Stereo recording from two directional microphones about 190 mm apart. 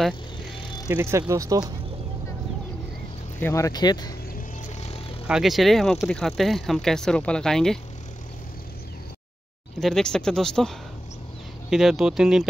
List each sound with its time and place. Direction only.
0.8 s speech: 15° right (ahead or behind)
3.3 s speech: 15° left (ahead or behind)
4.4 s vehicle: 35° left (ahead or behind)
5.2 s speech: centre (ahead or behind)
9.8 s speech: centre (ahead or behind)
11.7 s speech: centre (ahead or behind)